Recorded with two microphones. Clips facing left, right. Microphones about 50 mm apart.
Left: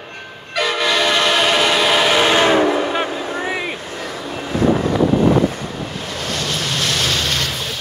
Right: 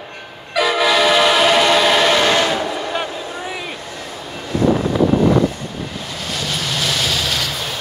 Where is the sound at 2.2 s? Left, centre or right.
Centre.